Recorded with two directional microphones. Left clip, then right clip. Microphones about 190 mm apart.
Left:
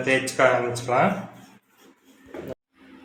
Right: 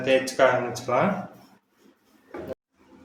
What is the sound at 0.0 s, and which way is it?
Speech, 20° left (ahead or behind).